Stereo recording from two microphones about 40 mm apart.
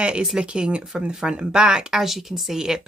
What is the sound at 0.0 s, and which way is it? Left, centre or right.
Speech, right.